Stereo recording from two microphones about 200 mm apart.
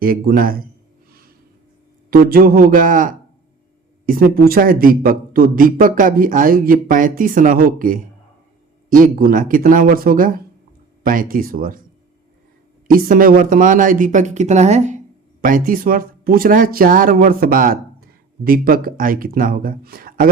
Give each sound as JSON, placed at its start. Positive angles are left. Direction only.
{"t": 0.0, "sound": "speech", "side_deg": -45}
{"t": 2.0, "sound": "speech", "side_deg": -45}
{"t": 12.9, "sound": "speech", "side_deg": -45}